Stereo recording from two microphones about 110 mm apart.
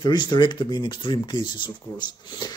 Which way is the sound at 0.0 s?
40° left (ahead or behind).